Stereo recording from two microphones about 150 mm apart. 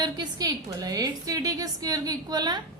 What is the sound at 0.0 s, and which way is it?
A woman's voice, 25° right (ahead or behind).